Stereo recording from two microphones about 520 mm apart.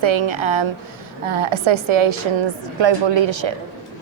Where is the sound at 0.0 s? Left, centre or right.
Right.